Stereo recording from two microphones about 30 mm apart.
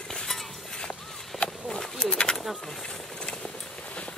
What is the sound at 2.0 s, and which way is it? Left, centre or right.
Bird, left.